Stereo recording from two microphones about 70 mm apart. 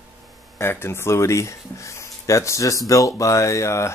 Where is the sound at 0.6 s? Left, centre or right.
Left.